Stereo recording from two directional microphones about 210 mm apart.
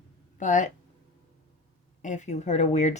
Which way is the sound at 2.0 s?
35° left (ahead or behind).